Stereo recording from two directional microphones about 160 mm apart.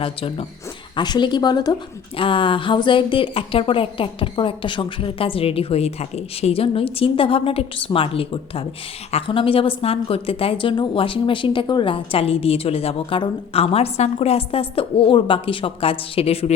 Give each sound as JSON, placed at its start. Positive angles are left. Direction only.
{"t": 0.0, "sound": "a woman's voice", "side_deg": 35}